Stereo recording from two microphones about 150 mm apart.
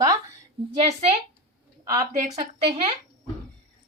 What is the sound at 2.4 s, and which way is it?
Speech, 40° right (ahead or behind).